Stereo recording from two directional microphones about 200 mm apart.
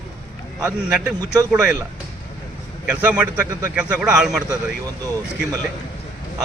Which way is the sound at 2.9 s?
10° right (ahead or behind).